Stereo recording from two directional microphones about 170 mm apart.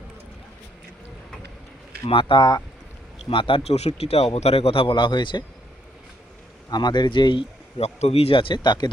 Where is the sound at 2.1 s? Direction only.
30° left (ahead or behind).